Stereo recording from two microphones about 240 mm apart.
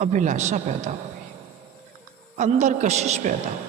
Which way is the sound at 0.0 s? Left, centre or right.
Right.